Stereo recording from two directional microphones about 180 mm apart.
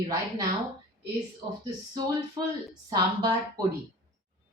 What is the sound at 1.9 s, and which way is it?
Speech, 20° right (ahead or behind).